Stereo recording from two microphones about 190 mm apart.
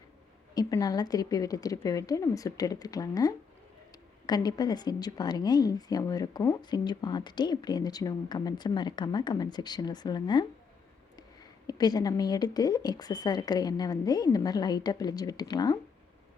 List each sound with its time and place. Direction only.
0.5 s a woman's voice: 20° left (ahead or behind)